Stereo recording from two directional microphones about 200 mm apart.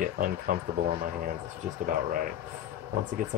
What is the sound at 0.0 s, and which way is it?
Speech, 45° right (ahead or behind).